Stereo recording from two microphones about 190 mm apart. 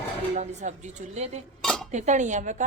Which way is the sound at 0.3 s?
40° right (ahead or behind).